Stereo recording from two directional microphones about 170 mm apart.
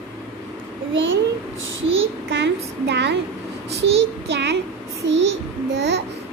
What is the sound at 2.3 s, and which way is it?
Speech, 80° right.